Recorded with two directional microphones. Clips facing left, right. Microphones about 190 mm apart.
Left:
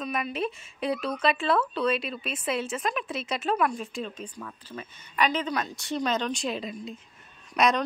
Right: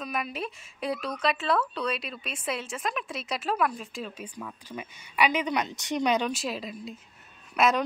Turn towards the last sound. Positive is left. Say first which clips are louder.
# even
turn(degrees=-5)  # may be behind; listen again after turning